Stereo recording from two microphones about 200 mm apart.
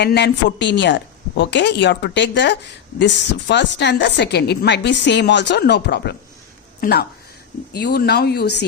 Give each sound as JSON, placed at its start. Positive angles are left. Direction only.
{"t": 0.0, "sound": "speech", "side_deg": 55}